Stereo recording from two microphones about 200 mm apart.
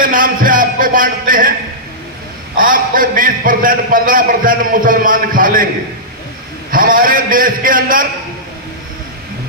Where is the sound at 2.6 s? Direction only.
45° right (ahead or behind).